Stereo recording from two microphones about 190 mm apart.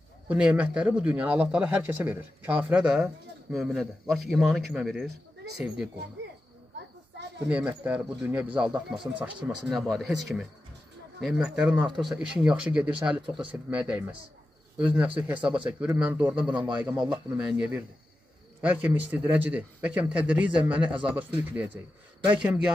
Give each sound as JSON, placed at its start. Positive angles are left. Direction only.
{"t": 0.3, "sound": "speech", "side_deg": -5}
{"t": 7.4, "sound": "speech", "side_deg": -5}
{"t": 15.1, "sound": "speech", "side_deg": -5}